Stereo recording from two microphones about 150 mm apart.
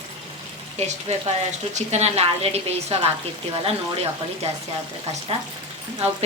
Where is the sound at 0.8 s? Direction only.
45° right (ahead or behind).